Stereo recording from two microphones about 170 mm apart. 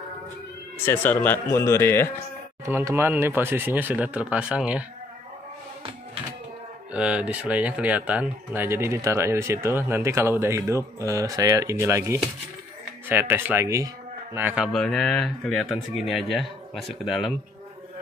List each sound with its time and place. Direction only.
0.8 s speech: 10° left (ahead or behind)
2.6 s speech: 15° right (ahead or behind)
6.9 s speech: 5° right (ahead or behind)